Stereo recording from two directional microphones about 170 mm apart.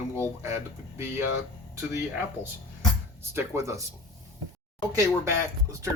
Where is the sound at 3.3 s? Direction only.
15° right (ahead or behind).